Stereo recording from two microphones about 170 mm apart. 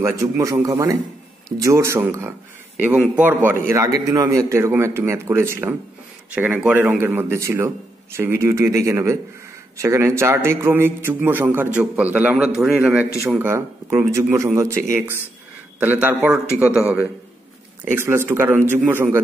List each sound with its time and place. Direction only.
0.0 s a man's voice: 20° right (ahead or behind)